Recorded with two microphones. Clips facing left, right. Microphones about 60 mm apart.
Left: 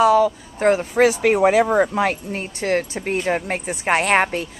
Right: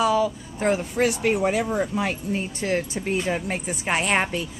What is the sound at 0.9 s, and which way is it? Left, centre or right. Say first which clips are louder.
Speech: left 6 dB; left.